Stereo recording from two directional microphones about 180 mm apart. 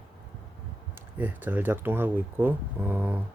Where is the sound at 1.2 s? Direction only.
10° right (ahead or behind).